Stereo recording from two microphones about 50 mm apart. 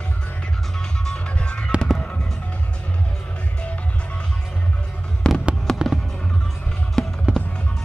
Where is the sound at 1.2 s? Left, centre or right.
Left.